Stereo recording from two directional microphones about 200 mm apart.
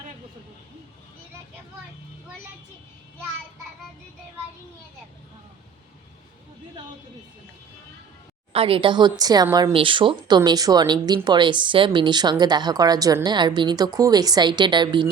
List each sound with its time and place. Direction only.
8.5 s speech: 25° right (ahead or behind)